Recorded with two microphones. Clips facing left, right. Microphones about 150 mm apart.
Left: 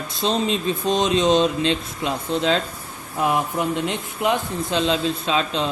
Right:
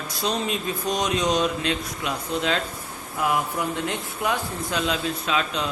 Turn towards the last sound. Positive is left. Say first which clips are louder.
# left 3 dB
turn(degrees=30)  # may be behind; listen again after turning